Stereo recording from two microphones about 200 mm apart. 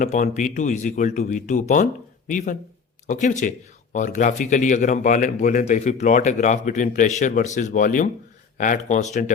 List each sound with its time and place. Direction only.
0.0 s speech: 40° left (ahead or behind)